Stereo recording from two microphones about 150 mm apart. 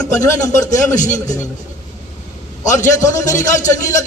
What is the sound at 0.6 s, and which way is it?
Speech, 55° left (ahead or behind).